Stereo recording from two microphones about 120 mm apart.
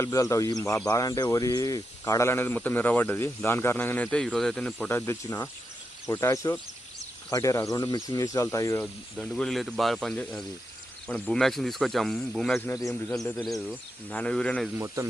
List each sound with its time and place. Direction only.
0.0 s speech: 25° left (ahead or behind)
8.8 s speech: 5° left (ahead or behind)
12.5 s speech: 25° left (ahead or behind)
12.9 s speech: 10° left (ahead or behind)
14.1 s speech: 10° left (ahead or behind)
15.0 s speech: 25° right (ahead or behind)